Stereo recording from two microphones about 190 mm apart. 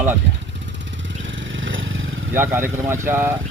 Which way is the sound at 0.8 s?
75° right (ahead or behind).